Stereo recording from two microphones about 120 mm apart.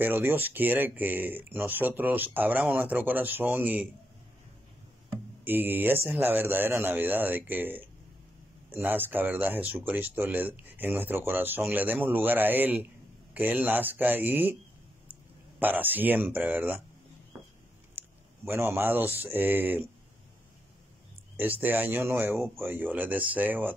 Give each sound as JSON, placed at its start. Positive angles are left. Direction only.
{"t": 0.0, "sound": "speech", "side_deg": -15}
{"t": 5.4, "sound": "speech", "side_deg": -15}
{"t": 15.6, "sound": "speech", "side_deg": -15}
{"t": 17.9, "sound": "speech", "side_deg": -20}
{"t": 21.4, "sound": "speech", "side_deg": -15}